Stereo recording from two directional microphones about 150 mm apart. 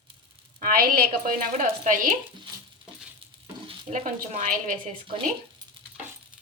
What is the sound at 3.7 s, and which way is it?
Speech, 50° right (ahead or behind).